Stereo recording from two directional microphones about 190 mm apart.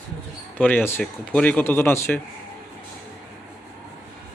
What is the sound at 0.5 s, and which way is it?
Speech, 10° left (ahead or behind).